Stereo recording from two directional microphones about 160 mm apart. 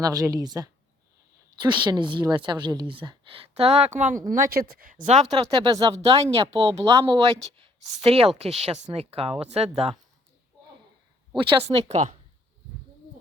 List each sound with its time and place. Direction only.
0.0 s speech: 20° right (ahead or behind); by 4.2 s 50° right (ahead or behind)
4.3 s speech: 60° right (ahead or behind); by 5.3 s 45° right (ahead or behind)
5.3 s speech: 30° right (ahead or behind)
11.3 s speech: 35° right (ahead or behind)